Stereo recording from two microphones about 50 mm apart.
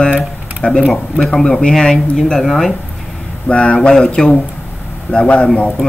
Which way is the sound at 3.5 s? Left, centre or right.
Left.